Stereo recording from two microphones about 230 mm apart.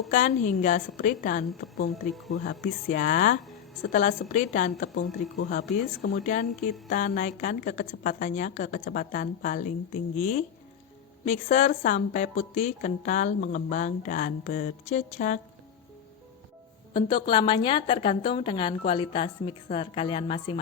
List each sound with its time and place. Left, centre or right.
0.1 s a woman's voice: left
16.9 s a woman's voice: left